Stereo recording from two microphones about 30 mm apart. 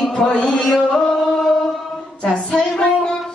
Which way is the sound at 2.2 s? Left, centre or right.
Left.